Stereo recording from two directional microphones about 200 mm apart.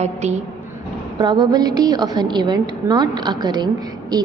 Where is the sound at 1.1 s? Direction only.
20° right (ahead or behind).